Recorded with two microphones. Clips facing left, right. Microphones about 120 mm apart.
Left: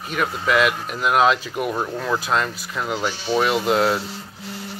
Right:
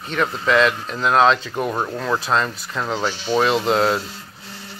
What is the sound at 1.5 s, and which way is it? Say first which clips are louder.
Speech: right 1 dB; 25° right (ahead or behind).